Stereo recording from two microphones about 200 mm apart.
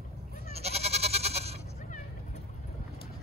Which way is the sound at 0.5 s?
30° right (ahead or behind).